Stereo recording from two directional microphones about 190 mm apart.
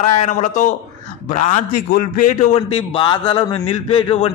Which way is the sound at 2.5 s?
30° left (ahead or behind).